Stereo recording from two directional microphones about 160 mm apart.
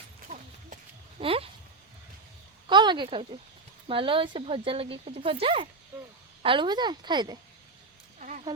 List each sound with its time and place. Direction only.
1.2 s speech: 35° right (ahead or behind)
2.6 s a sound: 30° right (ahead or behind)
3.8 s speech: 35° right (ahead or behind)